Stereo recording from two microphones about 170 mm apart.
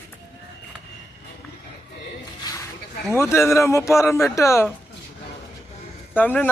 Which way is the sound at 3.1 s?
15° left (ahead or behind).